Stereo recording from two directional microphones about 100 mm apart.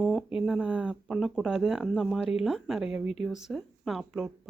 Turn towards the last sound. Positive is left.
turn(degrees=0)  # may be behind; listen again after turning